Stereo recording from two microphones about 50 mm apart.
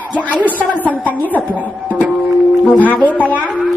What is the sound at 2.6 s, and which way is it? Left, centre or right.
Speech, left.